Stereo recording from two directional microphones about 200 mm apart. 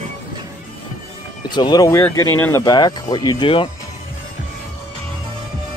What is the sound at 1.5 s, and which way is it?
Speech, 20° left (ahead or behind).